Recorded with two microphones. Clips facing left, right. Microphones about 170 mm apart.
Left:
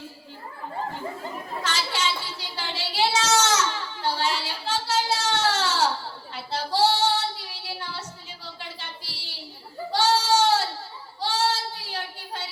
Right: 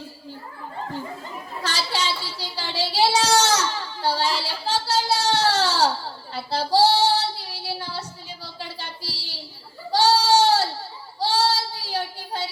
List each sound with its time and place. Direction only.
1.6 s child singing: 35° right (ahead or behind)
8.5 s a sound: 35° right (ahead or behind)
9.9 s sheep: 35° right (ahead or behind)
11.2 s child singing: 35° right (ahead or behind)